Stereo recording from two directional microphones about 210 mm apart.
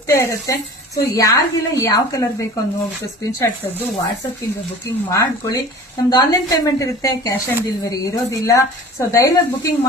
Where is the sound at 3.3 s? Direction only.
15° left (ahead or behind).